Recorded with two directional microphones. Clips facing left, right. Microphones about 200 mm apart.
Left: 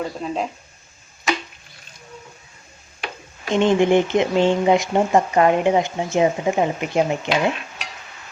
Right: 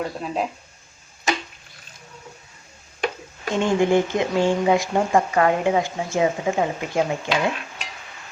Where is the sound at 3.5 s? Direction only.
20° left (ahead or behind).